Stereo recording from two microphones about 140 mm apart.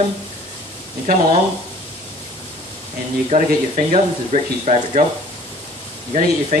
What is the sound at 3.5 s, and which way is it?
Speech, 70° right (ahead or behind).